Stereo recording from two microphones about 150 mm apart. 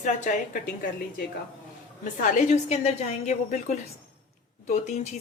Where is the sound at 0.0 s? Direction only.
65° left (ahead or behind).